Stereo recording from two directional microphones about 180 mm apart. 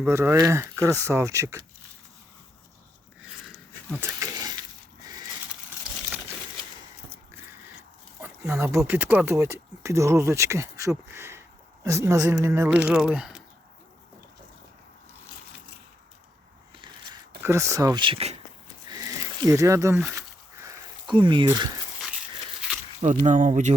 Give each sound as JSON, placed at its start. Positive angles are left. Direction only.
{"t": 0.0, "sound": "speech", "side_deg": -15}
{"t": 3.9, "sound": "a sound", "side_deg": -15}
{"t": 8.2, "sound": "speech", "side_deg": -10}
{"t": 17.4, "sound": "speech", "side_deg": -15}
{"t": 18.9, "sound": "a sound", "side_deg": -20}
{"t": 21.4, "sound": "speech", "side_deg": -20}
{"t": 23.2, "sound": "speech", "side_deg": -45}